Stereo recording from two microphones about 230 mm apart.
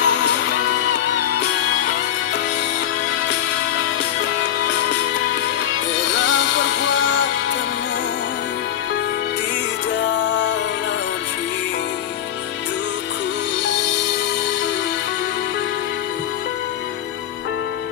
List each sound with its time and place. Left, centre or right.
0.0 s music: left
7.0 s music: left
10.0 s music: left